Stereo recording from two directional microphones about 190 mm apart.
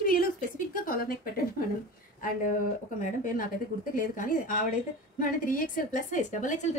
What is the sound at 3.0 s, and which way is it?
A woman's voice, 45° left (ahead or behind).